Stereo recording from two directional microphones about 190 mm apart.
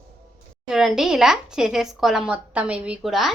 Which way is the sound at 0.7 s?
Centre (ahead or behind).